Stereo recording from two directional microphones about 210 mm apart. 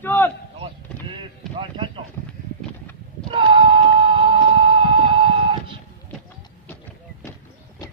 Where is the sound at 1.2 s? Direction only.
25° right (ahead or behind).